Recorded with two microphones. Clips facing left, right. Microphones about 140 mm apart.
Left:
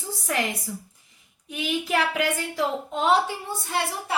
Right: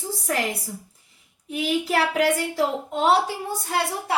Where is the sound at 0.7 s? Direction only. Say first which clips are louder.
Left 1 dB; 40° right (ahead or behind).